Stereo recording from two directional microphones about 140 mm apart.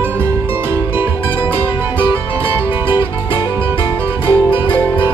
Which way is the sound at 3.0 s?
35° left (ahead or behind).